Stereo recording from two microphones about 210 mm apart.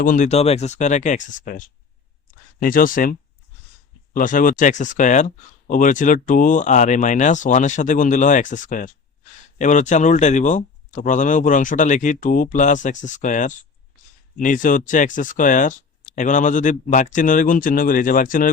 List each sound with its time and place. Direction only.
0.0 s speech: 40° left (ahead or behind)